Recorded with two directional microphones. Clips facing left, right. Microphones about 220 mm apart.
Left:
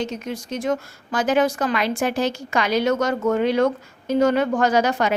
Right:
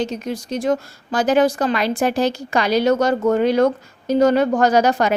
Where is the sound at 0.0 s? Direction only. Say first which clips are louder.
Right 3 dB; 35° right (ahead or behind).